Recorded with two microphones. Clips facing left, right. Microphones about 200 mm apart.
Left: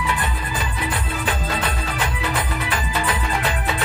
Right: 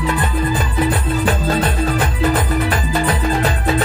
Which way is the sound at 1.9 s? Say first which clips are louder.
Right 7 dB; 45° right (ahead or behind).